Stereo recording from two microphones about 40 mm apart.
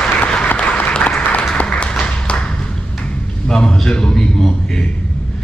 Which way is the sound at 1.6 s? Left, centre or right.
Left.